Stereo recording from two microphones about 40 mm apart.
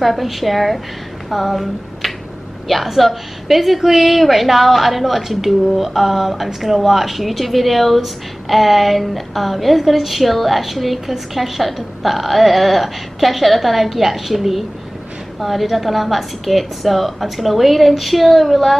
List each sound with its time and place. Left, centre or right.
0.0 s a woman's voice: centre